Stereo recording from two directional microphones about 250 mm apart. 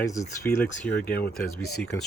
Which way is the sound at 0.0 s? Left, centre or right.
Centre.